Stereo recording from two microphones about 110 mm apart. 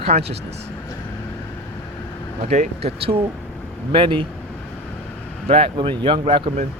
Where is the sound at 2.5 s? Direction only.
80° right.